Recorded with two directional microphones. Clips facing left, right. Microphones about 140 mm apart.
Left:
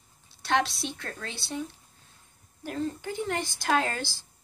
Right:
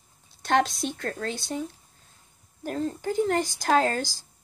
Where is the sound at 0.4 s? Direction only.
50° right (ahead or behind).